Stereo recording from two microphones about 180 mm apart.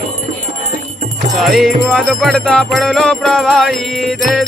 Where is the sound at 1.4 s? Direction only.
Centre (ahead or behind).